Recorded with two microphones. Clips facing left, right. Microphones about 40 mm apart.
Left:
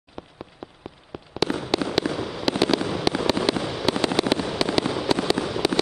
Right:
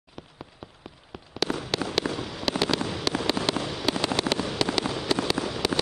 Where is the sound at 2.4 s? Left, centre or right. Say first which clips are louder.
Left 4 dB; centre.